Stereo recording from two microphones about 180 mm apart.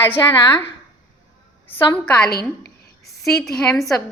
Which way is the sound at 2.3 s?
60° left (ahead or behind).